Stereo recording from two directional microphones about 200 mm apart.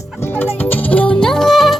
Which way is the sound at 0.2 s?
10° left (ahead or behind).